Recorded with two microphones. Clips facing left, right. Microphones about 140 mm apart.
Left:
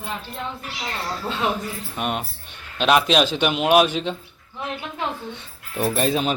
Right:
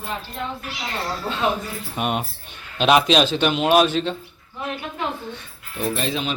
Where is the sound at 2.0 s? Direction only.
5° right (ahead or behind); by 4.1 s 10° left (ahead or behind).